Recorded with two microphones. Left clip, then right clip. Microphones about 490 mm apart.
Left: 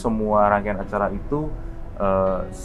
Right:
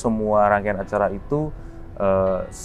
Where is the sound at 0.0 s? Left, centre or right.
Right.